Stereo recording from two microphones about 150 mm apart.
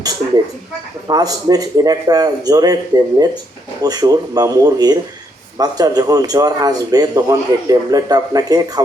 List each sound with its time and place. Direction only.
1.0 s a man's voice: 25° right (ahead or behind)